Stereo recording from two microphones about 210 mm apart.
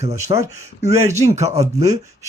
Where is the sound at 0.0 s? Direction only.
30° right (ahead or behind).